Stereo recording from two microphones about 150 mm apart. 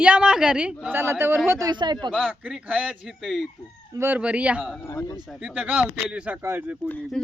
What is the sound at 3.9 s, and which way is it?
Speech, 15° right (ahead or behind).